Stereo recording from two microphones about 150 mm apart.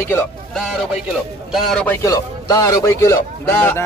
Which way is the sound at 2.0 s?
20° left (ahead or behind).